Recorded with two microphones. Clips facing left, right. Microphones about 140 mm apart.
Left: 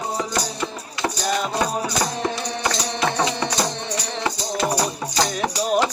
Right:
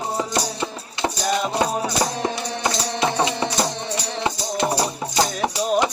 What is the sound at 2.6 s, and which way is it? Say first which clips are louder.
Music: right 1 dB; 25° right (ahead or behind).